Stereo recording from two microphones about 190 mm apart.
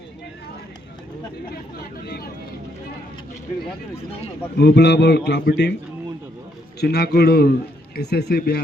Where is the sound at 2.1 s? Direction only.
55° left (ahead or behind).